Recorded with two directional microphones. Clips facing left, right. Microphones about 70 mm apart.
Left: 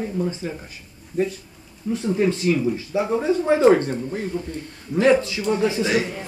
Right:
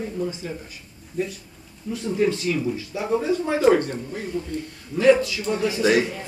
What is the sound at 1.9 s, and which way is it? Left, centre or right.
Speech, left.